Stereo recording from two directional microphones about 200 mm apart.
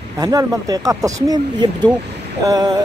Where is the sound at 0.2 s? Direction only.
20° right (ahead or behind).